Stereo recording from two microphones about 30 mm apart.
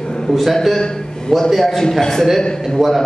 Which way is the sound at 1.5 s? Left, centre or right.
Centre.